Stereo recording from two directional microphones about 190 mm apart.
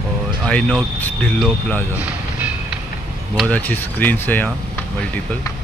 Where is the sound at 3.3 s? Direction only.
5° left (ahead or behind).